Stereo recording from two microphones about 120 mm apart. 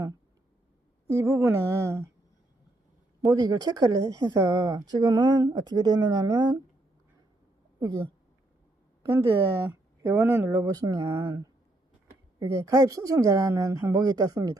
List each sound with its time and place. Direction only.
1.1 s speech: 20° right (ahead or behind)
3.2 s speech: 30° right (ahead or behind)
7.8 s speech: 35° right (ahead or behind)
9.0 s speech: 20° right (ahead or behind)
11.2 s speech: 40° right (ahead or behind)
12.4 s speech: 25° right (ahead or behind)